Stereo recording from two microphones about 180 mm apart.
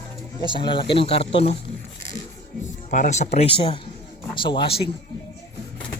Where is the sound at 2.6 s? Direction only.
40° left (ahead or behind).